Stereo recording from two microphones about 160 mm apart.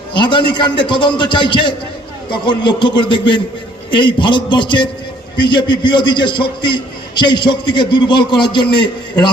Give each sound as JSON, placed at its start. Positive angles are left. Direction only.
{"t": 0.1, "sound": "a man's voice", "side_deg": 30}